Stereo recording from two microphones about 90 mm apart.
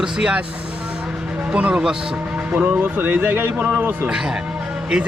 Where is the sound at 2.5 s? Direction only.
20° right (ahead or behind).